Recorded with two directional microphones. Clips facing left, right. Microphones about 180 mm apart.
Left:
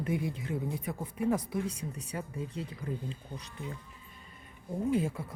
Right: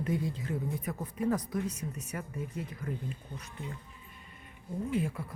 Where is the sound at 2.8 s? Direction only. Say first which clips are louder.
Left 1 dB; 15° left (ahead or behind).